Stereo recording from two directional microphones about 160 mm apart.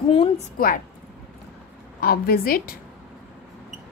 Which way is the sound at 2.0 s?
70° left (ahead or behind).